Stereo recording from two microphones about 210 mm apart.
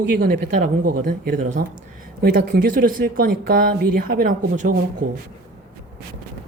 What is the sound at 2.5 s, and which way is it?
Speech, 40° right (ahead or behind).